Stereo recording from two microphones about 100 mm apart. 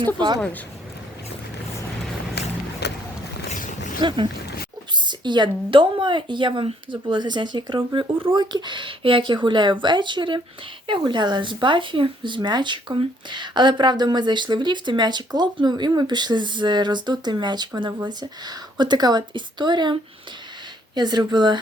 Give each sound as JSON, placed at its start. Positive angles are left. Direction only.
{"t": 0.0, "sound": "speech", "side_deg": -50}
{"t": 4.0, "sound": "speech", "side_deg": -55}